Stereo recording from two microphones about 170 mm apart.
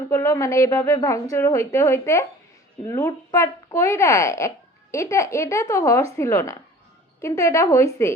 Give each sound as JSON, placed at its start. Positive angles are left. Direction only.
{"t": 0.1, "sound": "speech", "side_deg": 15}